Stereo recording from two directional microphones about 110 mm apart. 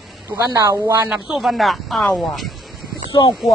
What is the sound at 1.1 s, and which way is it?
Speech, centre (ahead or behind).